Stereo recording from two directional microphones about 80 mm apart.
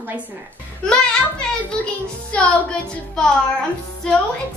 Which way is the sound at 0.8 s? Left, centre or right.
Centre.